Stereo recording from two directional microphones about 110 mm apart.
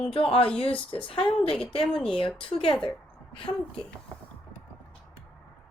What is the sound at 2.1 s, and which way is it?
Speech, 55° left (ahead or behind).